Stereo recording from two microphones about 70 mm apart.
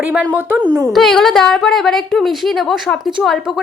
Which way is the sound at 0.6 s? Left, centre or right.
Right.